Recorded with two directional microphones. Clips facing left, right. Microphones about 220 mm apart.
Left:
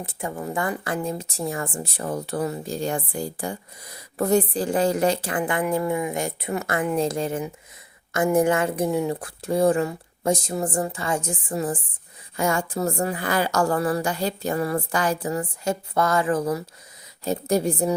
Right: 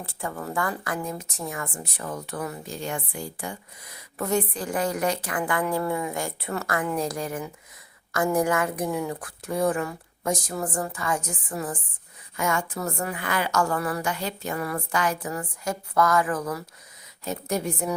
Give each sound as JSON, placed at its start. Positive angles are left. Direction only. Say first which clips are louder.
{"t": 0.0, "sound": "a woman's voice", "louder": "left 3 dB", "side_deg": 20}